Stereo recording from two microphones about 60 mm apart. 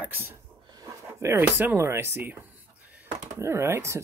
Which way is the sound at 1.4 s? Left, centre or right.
Right.